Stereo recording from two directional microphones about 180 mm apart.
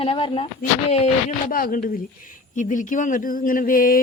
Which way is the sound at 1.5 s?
50° left (ahead or behind).